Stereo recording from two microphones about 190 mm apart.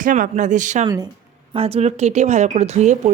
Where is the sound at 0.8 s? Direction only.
20° right (ahead or behind).